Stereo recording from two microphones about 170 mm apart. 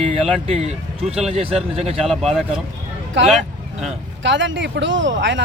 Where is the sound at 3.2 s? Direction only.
90° right.